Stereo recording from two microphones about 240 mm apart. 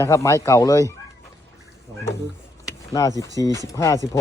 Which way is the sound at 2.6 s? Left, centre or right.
Centre.